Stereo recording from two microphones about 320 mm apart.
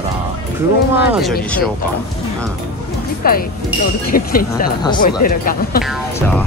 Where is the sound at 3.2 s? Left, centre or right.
Left.